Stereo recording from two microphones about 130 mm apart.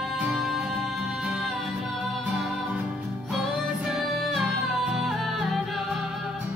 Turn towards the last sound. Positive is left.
turn(degrees=0)  # may be behind; listen again after turning